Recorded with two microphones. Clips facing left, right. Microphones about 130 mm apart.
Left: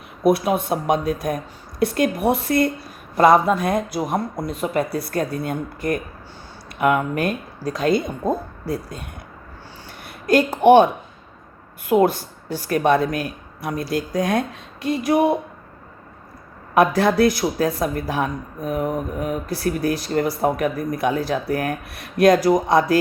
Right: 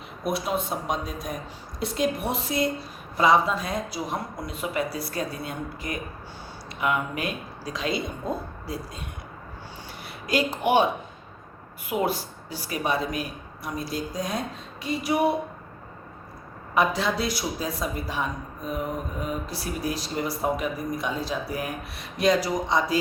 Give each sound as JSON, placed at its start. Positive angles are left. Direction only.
{"t": 0.3, "sound": "speech", "side_deg": 55}
{"t": 4.4, "sound": "speech", "side_deg": 40}
{"t": 11.9, "sound": "speech", "side_deg": 45}
{"t": 16.7, "sound": "speech", "side_deg": 55}